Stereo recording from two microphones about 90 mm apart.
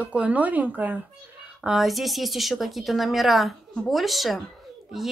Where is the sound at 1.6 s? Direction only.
Centre (ahead or behind).